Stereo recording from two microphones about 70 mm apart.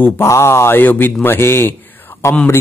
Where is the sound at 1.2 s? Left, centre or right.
Left.